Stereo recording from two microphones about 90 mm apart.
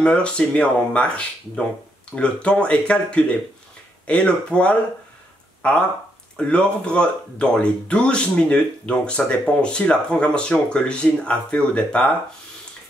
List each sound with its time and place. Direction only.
0.0 s speech: 10° left (ahead or behind)